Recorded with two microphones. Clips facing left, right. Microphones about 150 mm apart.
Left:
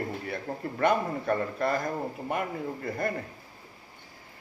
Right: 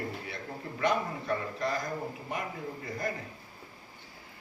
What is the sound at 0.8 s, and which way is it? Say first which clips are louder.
A man's voice: left 4 dB; 55° left (ahead or behind).